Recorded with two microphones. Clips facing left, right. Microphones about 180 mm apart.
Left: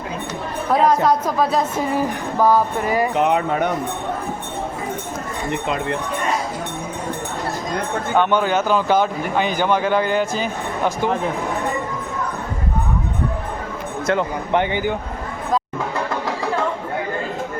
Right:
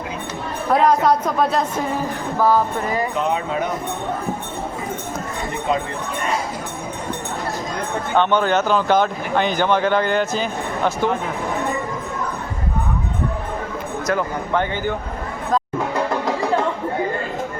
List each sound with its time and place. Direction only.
0.7 s a woman's voice: centre (ahead or behind)
2.0 s speech: 15° left (ahead or behind)
3.2 s speech: 65° left (ahead or behind)
8.1 s speech: 10° left (ahead or behind)
14.1 s speech: 20° left (ahead or behind)